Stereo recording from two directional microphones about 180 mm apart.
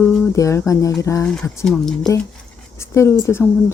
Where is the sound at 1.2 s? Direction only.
5° left (ahead or behind).